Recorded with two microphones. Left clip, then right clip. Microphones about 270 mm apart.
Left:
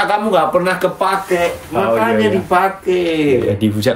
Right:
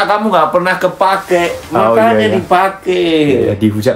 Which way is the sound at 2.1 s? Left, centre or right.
Centre.